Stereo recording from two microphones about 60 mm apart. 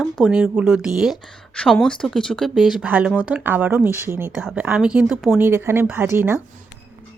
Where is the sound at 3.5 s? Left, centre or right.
Right.